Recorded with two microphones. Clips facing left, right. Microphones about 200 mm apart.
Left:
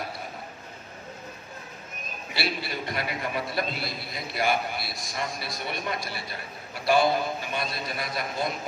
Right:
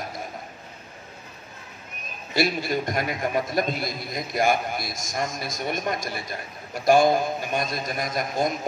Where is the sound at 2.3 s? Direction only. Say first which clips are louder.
Right 8 dB; 45° right (ahead or behind).